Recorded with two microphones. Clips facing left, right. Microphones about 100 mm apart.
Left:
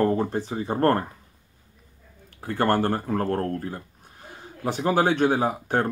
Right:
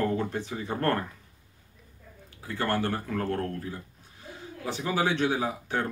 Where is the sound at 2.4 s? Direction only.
50° left (ahead or behind).